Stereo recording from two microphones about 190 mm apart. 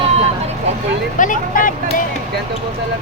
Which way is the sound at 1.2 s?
45° left (ahead or behind).